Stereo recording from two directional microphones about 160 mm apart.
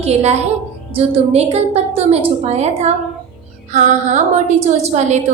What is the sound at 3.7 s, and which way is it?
Music, 50° right (ahead or behind).